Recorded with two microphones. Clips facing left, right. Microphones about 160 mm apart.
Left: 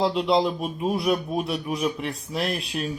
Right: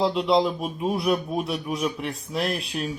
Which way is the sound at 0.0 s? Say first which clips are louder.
Even; centre (ahead or behind).